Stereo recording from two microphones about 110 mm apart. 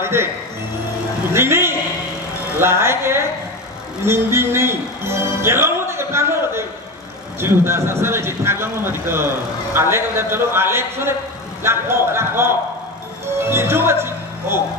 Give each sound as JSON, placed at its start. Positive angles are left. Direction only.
{"t": 0.0, "sound": "speech", "side_deg": -20}
{"t": 1.3, "sound": "a man's voice", "side_deg": -20}
{"t": 4.0, "sound": "music", "side_deg": -20}
{"t": 7.3, "sound": "a man's voice", "side_deg": -20}